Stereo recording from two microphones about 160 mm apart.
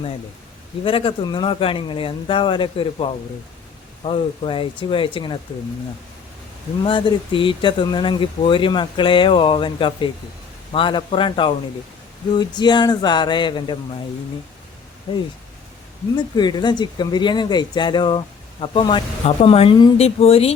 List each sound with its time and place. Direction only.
0.9 s speech: 35° left (ahead or behind)
6.8 s speech: 35° left (ahead or behind)
15.1 s speech: 30° left (ahead or behind)